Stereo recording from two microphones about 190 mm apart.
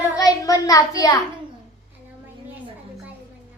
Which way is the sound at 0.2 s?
20° left (ahead or behind).